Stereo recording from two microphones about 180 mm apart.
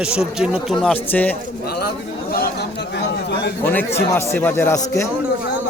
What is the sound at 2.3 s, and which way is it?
Chatter, 55° left (ahead or behind).